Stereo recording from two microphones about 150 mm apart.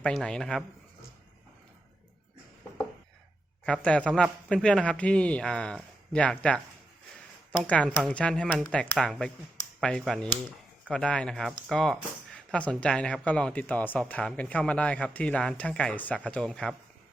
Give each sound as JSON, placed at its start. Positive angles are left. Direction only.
{"t": 0.0, "sound": "speech", "side_deg": 5}
{"t": 3.7, "sound": "speech", "side_deg": 5}
{"t": 7.6, "sound": "speech", "side_deg": 5}